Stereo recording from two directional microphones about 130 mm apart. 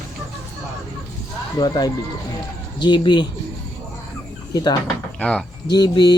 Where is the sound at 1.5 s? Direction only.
30° left (ahead or behind).